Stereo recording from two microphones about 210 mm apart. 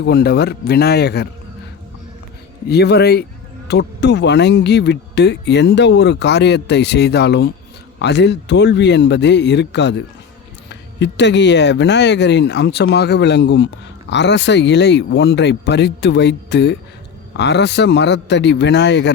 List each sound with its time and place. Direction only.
0.0 s speech: 50° left (ahead or behind)
2.6 s speech: 50° left (ahead or behind)